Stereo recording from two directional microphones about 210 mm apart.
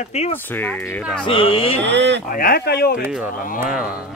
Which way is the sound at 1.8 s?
55° right (ahead or behind).